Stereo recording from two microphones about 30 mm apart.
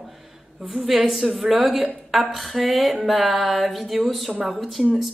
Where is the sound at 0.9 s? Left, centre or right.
Centre.